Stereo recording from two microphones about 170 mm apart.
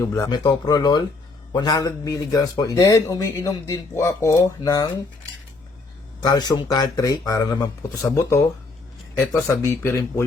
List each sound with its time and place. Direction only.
0.0 s a man's voice: 15° left (ahead or behind)
6.2 s a man's voice: 25° left (ahead or behind)